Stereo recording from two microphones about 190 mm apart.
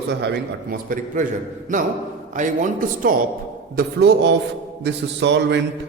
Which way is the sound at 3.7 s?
60° right (ahead or behind).